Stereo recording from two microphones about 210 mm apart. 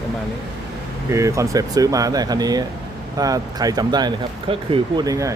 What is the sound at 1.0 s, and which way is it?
Speech, 15° right (ahead or behind).